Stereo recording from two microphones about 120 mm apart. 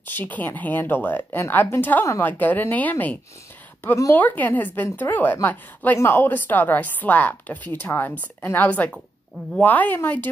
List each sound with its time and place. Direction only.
0.0 s speech: 15° left (ahead or behind)